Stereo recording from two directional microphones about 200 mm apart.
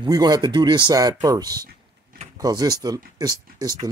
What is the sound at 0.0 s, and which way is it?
Speech, 20° right (ahead or behind).